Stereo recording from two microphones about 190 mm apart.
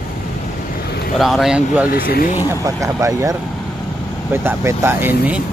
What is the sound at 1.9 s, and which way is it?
Speech, 50° left (ahead or behind).